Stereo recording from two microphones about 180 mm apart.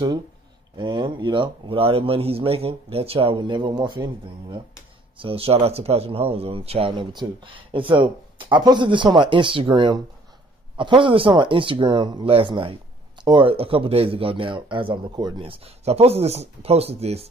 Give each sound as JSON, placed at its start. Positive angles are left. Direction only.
{"t": 0.7, "sound": "a man's voice", "side_deg": -25}